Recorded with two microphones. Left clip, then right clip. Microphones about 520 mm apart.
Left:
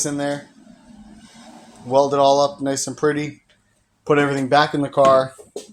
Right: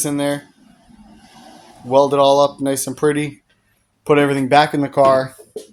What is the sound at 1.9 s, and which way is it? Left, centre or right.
Speech, right.